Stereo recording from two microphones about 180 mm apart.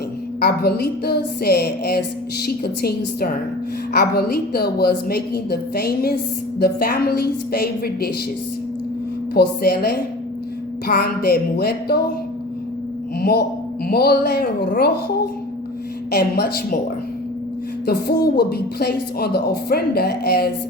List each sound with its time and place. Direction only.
0.3 s a woman's voice: 60° left (ahead or behind)
9.3 s a woman's voice: 60° left (ahead or behind)
13.1 s a woman's voice: 55° left (ahead or behind)
16.1 s a woman's voice: 60° left (ahead or behind)
17.8 s a woman's voice: 60° left (ahead or behind)